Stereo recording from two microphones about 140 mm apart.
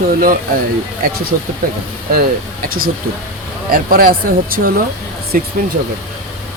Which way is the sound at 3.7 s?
90° right.